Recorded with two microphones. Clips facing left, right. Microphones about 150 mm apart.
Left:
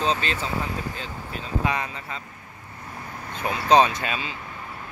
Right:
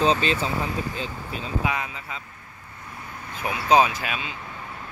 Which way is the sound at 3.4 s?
10° right (ahead or behind).